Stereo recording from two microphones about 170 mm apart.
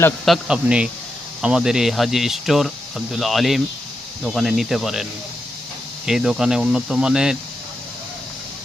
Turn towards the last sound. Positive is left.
turn(degrees=-5)  # may be behind; listen again after turning